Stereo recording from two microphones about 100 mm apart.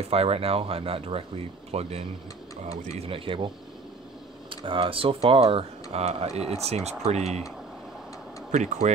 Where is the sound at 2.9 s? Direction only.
70° right (ahead or behind).